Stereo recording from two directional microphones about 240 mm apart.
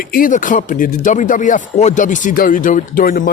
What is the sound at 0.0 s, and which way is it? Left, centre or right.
Speech, left.